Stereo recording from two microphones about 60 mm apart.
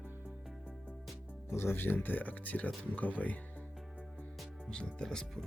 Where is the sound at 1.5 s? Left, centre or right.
Left.